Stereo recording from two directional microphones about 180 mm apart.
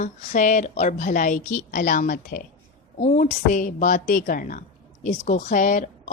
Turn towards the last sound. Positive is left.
turn(degrees=45)  # may be behind; listen again after turning